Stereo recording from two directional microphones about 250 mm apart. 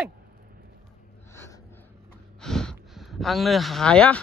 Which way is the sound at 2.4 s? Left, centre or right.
Centre.